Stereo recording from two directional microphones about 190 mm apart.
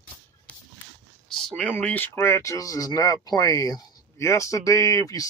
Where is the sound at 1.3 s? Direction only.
Centre (ahead or behind).